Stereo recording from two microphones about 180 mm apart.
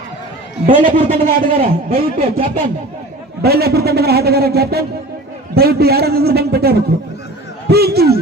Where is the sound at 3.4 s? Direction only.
60° right (ahead or behind).